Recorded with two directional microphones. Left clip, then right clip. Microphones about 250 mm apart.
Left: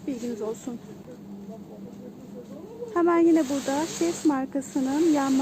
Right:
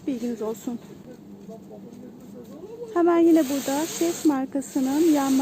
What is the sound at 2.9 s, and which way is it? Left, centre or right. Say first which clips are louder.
Speech: right 2 dB; centre.